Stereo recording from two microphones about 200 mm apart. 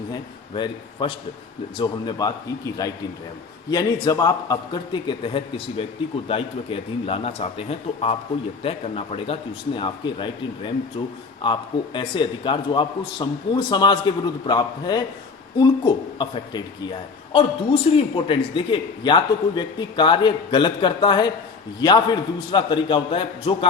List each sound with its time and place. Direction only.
0.1 s a man's voice: 25° left (ahead or behind)